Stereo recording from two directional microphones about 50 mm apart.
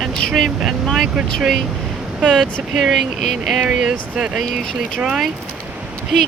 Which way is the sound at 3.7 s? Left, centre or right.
Centre.